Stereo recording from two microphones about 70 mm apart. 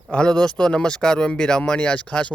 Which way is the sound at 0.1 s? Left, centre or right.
Centre.